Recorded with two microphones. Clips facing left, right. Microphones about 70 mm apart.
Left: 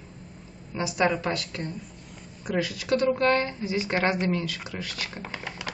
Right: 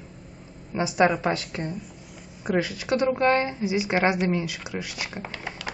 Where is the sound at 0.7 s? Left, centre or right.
Right.